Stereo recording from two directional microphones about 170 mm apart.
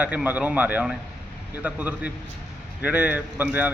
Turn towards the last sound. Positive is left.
turn(degrees=-10)  # may be behind; listen again after turning